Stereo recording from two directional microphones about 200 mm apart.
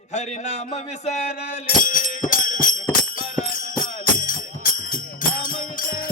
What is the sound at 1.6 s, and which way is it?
Music, 40° left (ahead or behind).